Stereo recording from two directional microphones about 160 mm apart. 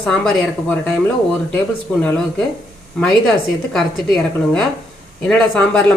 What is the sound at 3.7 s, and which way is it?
Speech, centre (ahead or behind).